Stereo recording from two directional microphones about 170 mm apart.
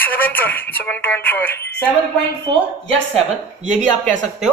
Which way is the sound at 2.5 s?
35° right (ahead or behind).